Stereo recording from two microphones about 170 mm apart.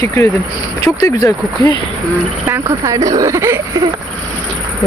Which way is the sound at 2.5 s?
15° right (ahead or behind).